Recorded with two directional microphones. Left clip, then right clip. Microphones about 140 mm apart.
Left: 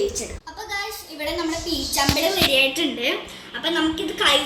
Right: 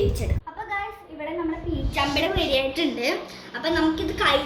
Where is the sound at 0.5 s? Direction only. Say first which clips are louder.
Even; 40° right (ahead or behind).